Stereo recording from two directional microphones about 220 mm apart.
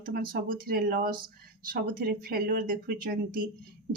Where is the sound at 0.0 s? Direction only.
40° right (ahead or behind).